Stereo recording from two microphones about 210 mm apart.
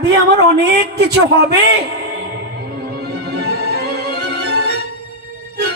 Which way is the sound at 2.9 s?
50° right (ahead or behind).